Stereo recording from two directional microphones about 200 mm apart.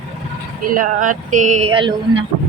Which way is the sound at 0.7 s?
40° right (ahead or behind).